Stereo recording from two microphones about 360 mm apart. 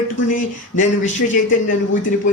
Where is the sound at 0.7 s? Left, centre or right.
Left.